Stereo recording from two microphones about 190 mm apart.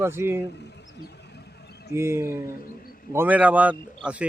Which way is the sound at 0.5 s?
65° left (ahead or behind).